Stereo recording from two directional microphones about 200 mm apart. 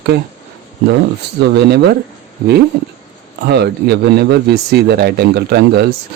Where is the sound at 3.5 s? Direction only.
55° right (ahead or behind).